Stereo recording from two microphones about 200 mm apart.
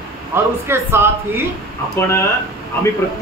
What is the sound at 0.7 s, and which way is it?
Speech, 10° right (ahead or behind).